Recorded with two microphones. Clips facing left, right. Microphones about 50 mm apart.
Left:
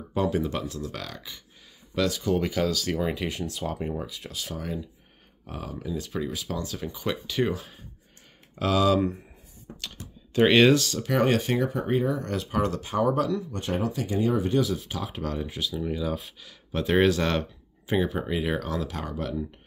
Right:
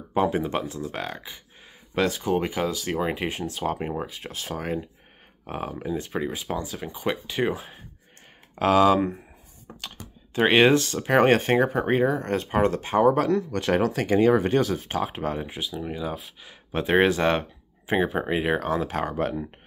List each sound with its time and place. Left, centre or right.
0.1 s speech: right
6.6 s speech: centre
8.5 s speech: right
9.8 s speech: centre; by 15.1 s right
15.1 s speech: right